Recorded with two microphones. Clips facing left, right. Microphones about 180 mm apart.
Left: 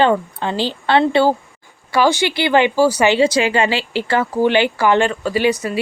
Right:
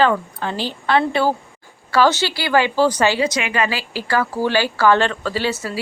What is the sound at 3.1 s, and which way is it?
Speech, 30° left (ahead or behind).